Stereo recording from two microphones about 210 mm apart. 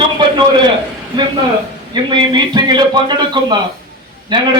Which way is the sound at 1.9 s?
20° right (ahead or behind).